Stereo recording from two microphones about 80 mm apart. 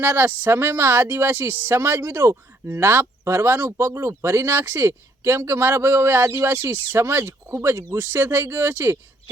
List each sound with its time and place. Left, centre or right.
0.0 s speech: right